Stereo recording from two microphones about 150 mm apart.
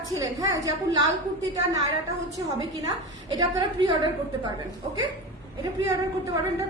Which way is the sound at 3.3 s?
30° right (ahead or behind).